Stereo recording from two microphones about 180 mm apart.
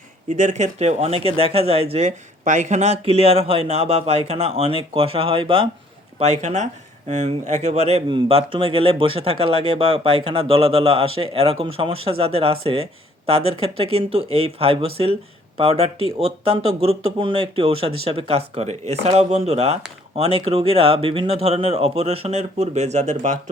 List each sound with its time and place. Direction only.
0.3 s speech: 40° right (ahead or behind)